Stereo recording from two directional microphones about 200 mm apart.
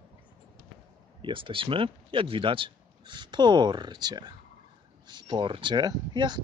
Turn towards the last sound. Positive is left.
turn(degrees=-20)  # may be behind; listen again after turning